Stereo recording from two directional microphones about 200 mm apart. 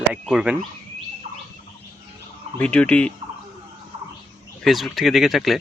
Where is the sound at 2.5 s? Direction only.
5° left (ahead or behind).